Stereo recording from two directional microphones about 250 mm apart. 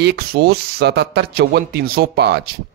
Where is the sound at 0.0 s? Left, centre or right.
Right.